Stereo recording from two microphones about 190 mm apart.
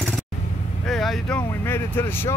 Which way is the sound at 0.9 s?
Centre (ahead or behind).